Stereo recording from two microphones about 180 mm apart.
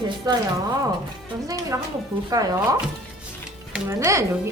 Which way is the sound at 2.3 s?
20° right (ahead or behind).